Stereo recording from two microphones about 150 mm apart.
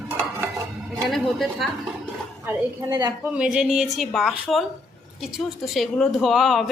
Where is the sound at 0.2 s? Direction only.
15° right (ahead or behind).